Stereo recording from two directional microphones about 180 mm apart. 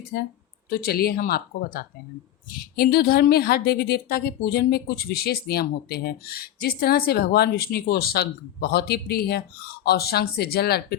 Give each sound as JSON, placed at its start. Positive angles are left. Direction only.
{"t": 0.7, "sound": "a woman's voice", "side_deg": 60}